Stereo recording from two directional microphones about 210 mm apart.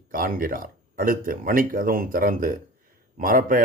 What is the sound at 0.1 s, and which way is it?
Speech, 40° right (ahead or behind).